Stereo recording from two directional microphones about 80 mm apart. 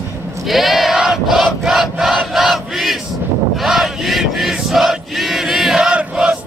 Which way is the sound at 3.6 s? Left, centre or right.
Centre.